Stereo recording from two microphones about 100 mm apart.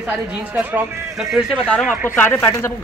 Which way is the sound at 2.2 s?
20° left (ahead or behind).